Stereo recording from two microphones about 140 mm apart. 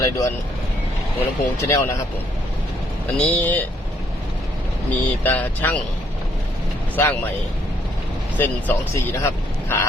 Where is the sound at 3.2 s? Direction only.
10° left (ahead or behind).